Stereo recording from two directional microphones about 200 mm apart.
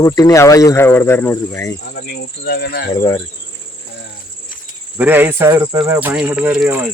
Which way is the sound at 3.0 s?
20° left (ahead or behind).